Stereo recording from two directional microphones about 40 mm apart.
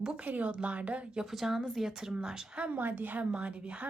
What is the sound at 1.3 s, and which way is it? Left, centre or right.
Speech, centre.